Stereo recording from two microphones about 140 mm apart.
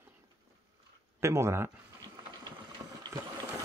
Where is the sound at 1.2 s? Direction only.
20° right (ahead or behind).